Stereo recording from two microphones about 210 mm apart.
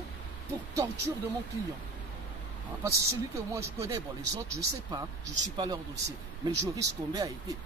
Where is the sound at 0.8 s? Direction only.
15° right (ahead or behind).